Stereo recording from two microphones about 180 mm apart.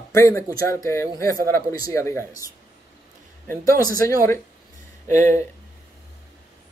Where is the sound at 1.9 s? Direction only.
15° left (ahead or behind).